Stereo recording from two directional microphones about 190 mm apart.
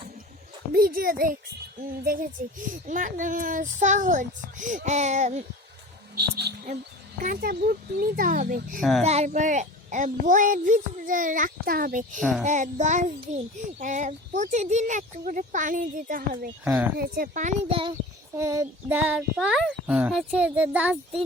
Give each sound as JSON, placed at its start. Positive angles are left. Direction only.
{"t": 0.7, "sound": "speech", "side_deg": -50}
{"t": 2.4, "sound": "a child's voice", "side_deg": -50}
{"t": 6.1, "sound": "a sound", "side_deg": -60}
{"t": 7.3, "sound": "speech", "side_deg": -50}
{"t": 8.8, "sound": "a child's voice", "side_deg": 0}
{"t": 9.0, "sound": "speech", "side_deg": -35}
{"t": 12.2, "sound": "a child's voice", "side_deg": 5}
{"t": 12.5, "sound": "a child's voice", "side_deg": -40}
{"t": 17.7, "sound": "a child's voice", "side_deg": -25}
{"t": 18.3, "sound": "a child's voice", "side_deg": -15}